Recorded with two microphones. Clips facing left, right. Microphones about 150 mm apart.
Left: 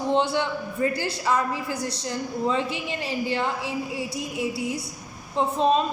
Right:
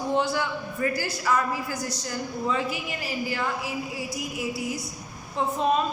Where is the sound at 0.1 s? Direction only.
25° left (ahead or behind).